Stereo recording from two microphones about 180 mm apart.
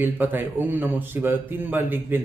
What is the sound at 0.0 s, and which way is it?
Speech, 10° right (ahead or behind).